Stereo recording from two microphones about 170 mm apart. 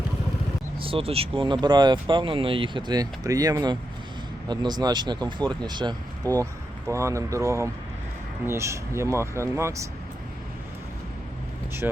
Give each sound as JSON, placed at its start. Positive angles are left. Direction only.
{"t": 0.8, "sound": "speech", "side_deg": -35}